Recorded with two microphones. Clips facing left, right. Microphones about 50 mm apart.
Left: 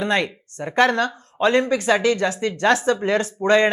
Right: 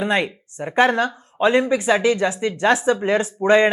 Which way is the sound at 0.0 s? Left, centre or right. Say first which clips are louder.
Right 1 dB; centre.